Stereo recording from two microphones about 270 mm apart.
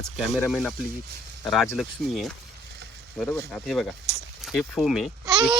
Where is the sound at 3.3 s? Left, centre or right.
Centre.